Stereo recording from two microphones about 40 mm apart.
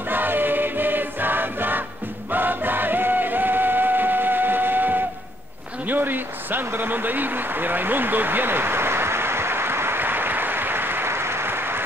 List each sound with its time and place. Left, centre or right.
0.1 s choir: right
2.3 s music: right
5.9 s a sound: right